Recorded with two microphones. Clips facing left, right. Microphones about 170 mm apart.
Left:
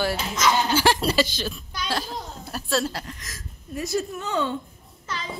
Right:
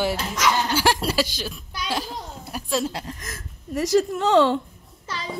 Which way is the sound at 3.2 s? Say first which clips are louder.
Right 4 dB; 55° right (ahead or behind).